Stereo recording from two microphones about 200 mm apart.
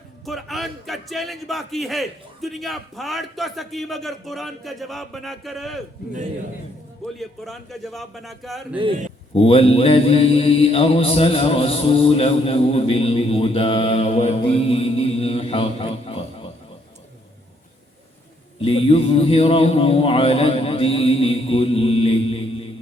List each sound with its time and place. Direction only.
0.3 s a man's voice: centre (ahead or behind)
7.2 s a man's voice: centre (ahead or behind)
8.7 s a man's voice: 25° right (ahead or behind)
9.3 s mantra: 30° left (ahead or behind)
18.6 s speech: 30° left (ahead or behind)